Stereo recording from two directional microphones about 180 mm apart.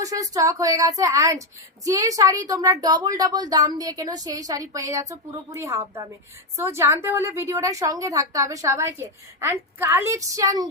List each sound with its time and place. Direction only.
0.0 s a woman's voice: 20° right (ahead or behind)